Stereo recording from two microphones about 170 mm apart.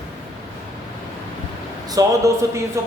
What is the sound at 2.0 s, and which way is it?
Speech, 20° right (ahead or behind).